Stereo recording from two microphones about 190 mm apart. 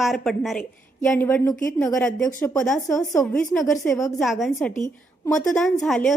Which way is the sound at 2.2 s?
15° left (ahead or behind).